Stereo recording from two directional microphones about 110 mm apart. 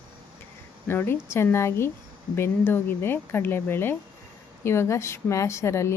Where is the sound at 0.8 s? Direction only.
20° left (ahead or behind).